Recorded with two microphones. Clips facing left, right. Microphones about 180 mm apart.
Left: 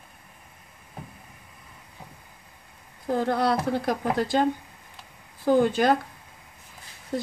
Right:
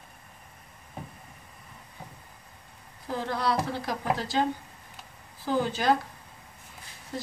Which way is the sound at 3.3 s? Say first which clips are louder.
Left 3 dB; 55° left (ahead or behind).